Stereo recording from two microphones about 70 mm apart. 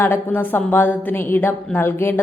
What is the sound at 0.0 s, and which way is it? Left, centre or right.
A woman's voice, left.